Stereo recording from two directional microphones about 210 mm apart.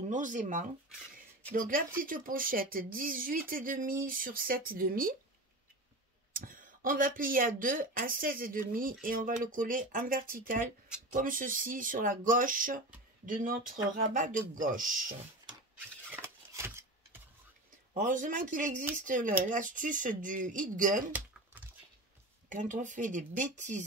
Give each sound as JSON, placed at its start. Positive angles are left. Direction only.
{"t": 0.1, "sound": "speech", "side_deg": -35}
{"t": 6.3, "sound": "speech", "side_deg": -40}
{"t": 16.1, "sound": "a sound", "side_deg": -10}
{"t": 17.9, "sound": "speech", "side_deg": -35}
{"t": 22.5, "sound": "speech", "side_deg": -35}